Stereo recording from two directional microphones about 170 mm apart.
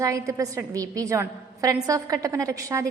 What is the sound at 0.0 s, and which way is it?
A woman's voice, 20° right (ahead or behind).